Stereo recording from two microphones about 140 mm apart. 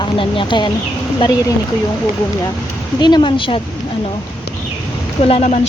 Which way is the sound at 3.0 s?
30° left (ahead or behind).